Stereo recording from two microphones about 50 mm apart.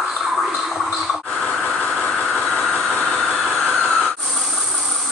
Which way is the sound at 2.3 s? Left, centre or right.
Centre.